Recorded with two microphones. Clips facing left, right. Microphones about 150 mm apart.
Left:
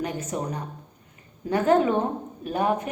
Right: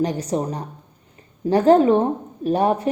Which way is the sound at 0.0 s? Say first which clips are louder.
Right 7 dB; 35° right (ahead or behind).